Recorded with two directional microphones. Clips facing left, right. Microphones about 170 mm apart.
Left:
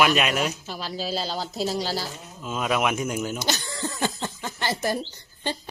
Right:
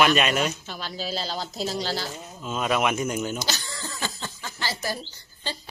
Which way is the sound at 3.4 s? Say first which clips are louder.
Left 4 dB; 20° left (ahead or behind).